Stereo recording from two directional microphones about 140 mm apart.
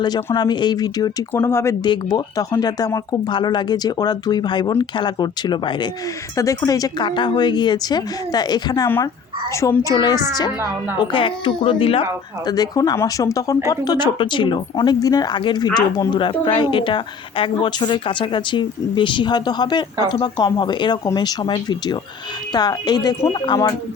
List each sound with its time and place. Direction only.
0.3 s speech: 30° left (ahead or behind)
1.3 s speech: 15° left (ahead or behind)
1.8 s speech: 30° left (ahead or behind)
12.5 s speech: 25° left (ahead or behind)